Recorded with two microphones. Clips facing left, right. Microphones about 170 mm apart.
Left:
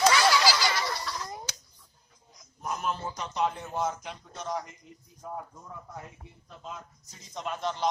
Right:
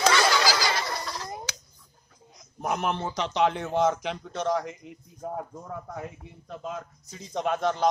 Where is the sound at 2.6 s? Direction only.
75° right (ahead or behind).